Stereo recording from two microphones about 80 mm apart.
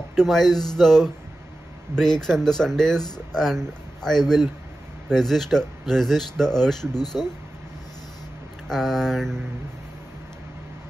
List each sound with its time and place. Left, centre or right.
0.1 s speech: centre
7.0 s speech: left
8.6 s speech: centre